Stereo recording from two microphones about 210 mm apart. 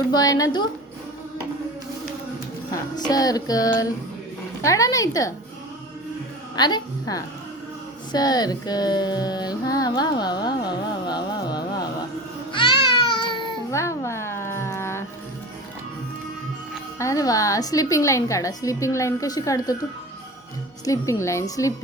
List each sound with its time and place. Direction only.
0.1 s a woman's voice: 15° left (ahead or behind)
3.1 s a woman's voice: 20° left (ahead or behind)
6.6 s female singing: 20° left (ahead or behind)
12.6 s baby cry: 25° left (ahead or behind)
13.1 s a sound: 20° left (ahead or behind)
17.0 s a woman's voice: 15° left (ahead or behind)
20.8 s a woman's voice: 15° left (ahead or behind)